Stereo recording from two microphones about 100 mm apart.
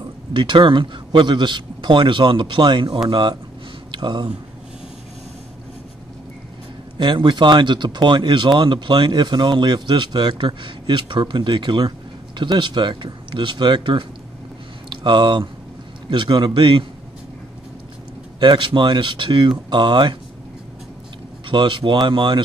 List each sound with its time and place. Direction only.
0.3 s speech: 55° right (ahead or behind)
7.0 s speech: 50° right (ahead or behind)
18.4 s speech: 55° right (ahead or behind)
21.5 s speech: 55° right (ahead or behind)